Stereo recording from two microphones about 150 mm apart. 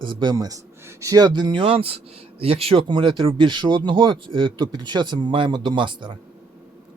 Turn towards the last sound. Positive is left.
turn(degrees=-30)  # may be behind; listen again after turning